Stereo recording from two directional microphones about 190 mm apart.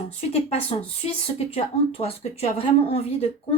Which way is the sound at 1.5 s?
30° left (ahead or behind).